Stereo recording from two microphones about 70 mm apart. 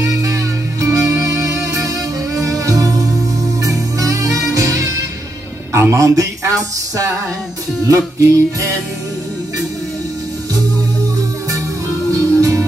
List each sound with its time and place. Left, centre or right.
0.0 s music: right
5.7 s speech: right
7.9 s music: right
12.1 s music: right